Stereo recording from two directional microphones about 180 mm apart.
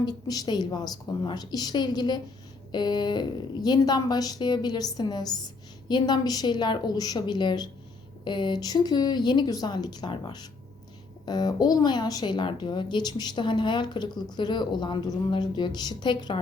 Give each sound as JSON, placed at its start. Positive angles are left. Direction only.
{"t": 0.0, "sound": "a woman's voice", "side_deg": 20}